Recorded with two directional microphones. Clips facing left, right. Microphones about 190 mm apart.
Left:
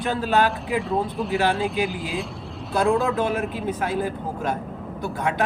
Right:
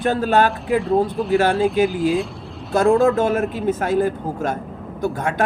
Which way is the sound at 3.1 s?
45° right (ahead or behind).